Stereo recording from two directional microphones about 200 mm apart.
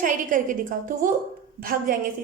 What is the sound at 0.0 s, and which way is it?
A woman's voice, 40° right (ahead or behind).